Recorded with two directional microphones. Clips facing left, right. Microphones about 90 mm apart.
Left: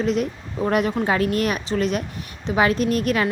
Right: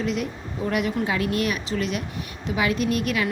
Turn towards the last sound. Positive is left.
turn(degrees=40)  # may be behind; listen again after turning